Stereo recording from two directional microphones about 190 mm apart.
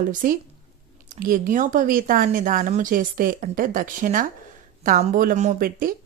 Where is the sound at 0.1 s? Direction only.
45° right (ahead or behind).